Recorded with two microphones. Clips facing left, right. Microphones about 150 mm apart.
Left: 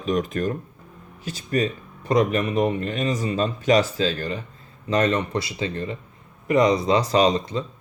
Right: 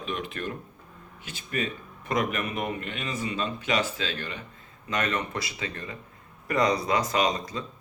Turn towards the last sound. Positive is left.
turn(degrees=30)  # may be behind; listen again after turning